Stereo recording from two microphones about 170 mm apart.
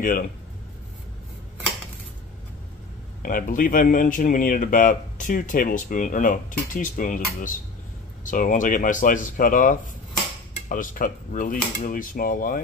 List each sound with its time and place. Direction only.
3.2 s speech: 55° left (ahead or behind)